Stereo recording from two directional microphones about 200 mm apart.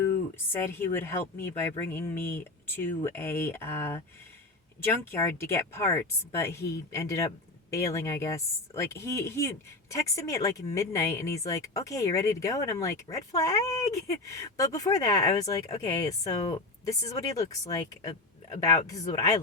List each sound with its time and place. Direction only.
0.7 s speech: 10° left (ahead or behind)